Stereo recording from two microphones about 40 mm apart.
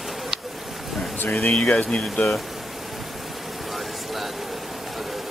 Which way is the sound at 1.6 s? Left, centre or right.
Left.